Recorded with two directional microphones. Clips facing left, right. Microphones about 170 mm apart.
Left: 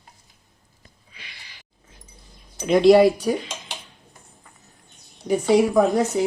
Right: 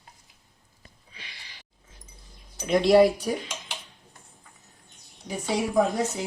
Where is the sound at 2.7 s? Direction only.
90° left.